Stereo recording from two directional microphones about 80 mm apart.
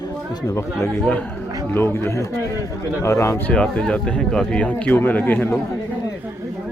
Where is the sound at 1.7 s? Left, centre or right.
Left.